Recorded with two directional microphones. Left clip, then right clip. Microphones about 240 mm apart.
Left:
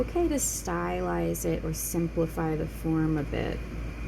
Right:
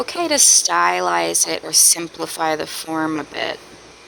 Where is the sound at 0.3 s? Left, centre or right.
Right.